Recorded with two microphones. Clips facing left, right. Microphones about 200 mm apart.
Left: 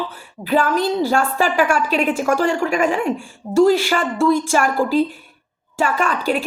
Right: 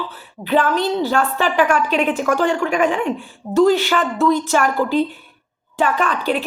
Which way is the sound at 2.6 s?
40° left (ahead or behind).